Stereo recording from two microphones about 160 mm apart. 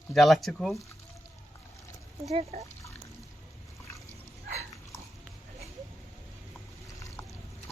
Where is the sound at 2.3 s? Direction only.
40° right (ahead or behind).